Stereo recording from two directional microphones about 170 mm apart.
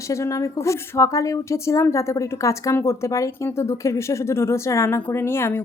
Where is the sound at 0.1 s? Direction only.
20° left (ahead or behind).